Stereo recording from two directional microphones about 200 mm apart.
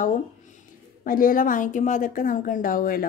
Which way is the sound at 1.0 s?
45° left (ahead or behind).